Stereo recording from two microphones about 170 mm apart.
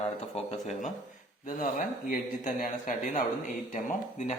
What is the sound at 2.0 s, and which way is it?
Speech, 50° left (ahead or behind).